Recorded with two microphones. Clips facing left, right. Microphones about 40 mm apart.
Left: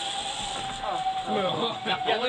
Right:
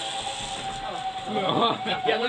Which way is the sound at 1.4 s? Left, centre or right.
Right.